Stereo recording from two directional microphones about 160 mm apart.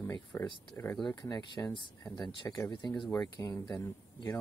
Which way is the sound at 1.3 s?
25° left (ahead or behind).